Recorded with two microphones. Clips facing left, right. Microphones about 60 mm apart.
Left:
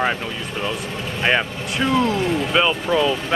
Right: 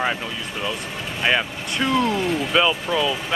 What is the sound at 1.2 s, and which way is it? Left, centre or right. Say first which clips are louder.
Speech: left 2 dB; centre.